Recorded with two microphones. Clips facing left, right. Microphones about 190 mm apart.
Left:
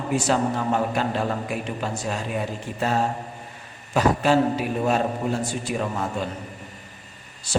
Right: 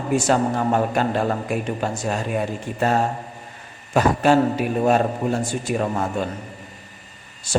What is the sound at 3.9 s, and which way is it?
A man's voice, 50° right (ahead or behind).